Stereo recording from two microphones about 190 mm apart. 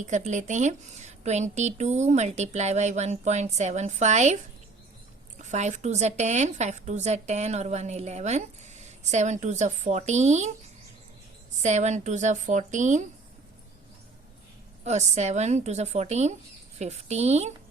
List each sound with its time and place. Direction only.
0.0 s a woman's voice: 40° right (ahead or behind)
5.4 s a woman's voice: 40° right (ahead or behind)
11.6 s a woman's voice: 40° right (ahead or behind)
14.8 s a woman's voice: 35° right (ahead or behind)